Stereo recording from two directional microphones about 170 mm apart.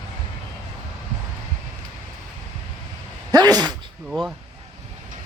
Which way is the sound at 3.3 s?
25° right (ahead or behind).